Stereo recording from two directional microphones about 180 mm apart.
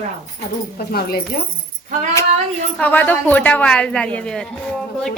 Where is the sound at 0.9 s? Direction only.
60° left (ahead or behind).